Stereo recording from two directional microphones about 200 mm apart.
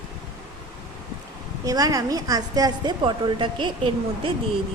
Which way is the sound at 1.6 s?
15° right (ahead or behind).